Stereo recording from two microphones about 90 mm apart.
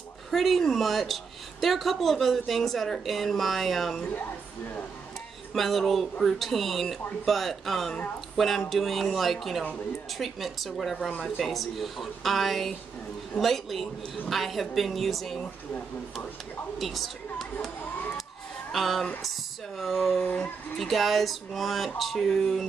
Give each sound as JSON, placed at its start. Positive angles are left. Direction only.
{"t": 0.3, "sound": "a woman's voice", "side_deg": 0}
{"t": 5.5, "sound": "a woman's voice", "side_deg": 0}
{"t": 16.7, "sound": "a woman's voice", "side_deg": 0}
{"t": 18.7, "sound": "a woman's voice", "side_deg": 0}
{"t": 20.2, "sound": "speech", "side_deg": 20}
{"t": 20.7, "sound": "a woman's voice", "side_deg": 0}